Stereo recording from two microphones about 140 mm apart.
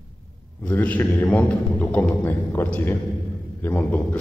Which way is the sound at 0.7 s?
10° left (ahead or behind).